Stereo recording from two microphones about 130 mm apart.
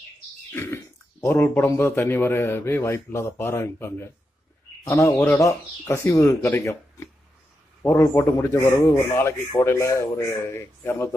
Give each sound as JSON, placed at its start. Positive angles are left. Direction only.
{"t": 0.5, "sound": "cough", "side_deg": 15}
{"t": 1.2, "sound": "speech", "side_deg": 20}